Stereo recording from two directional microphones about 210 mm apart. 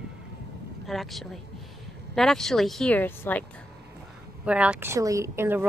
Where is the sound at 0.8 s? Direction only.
Centre (ahead or behind).